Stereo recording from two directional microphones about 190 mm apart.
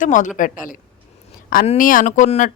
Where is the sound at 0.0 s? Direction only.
40° left (ahead or behind).